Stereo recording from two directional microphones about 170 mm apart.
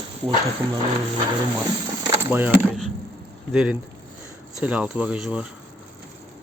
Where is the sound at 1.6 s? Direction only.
20° right (ahead or behind).